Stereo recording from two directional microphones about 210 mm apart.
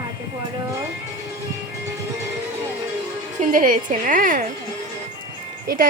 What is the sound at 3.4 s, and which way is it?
A woman's voice, 40° right (ahead or behind).